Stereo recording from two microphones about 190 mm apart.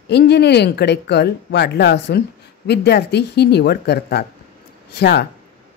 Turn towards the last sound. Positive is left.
turn(degrees=60)  # may be behind; listen again after turning